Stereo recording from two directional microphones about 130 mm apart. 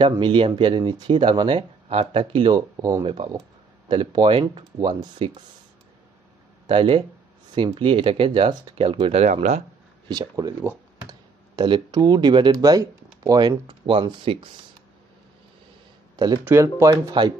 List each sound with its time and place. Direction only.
0.0 s speech: 35° right (ahead or behind)
6.7 s speech: 40° right (ahead or behind)
9.2 s speech: 70° right (ahead or behind)
10.0 s speech: 30° right (ahead or behind)
16.4 s speech: 20° right (ahead or behind)